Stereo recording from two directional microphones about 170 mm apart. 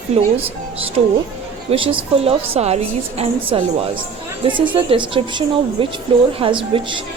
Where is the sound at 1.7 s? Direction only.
30° right (ahead or behind).